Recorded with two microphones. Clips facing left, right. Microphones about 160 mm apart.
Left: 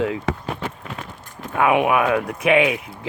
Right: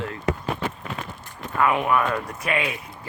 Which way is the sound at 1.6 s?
80° left.